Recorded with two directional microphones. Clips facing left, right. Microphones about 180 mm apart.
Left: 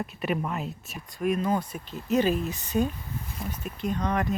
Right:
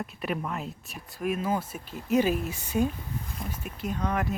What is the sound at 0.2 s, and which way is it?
Speech, centre (ahead or behind).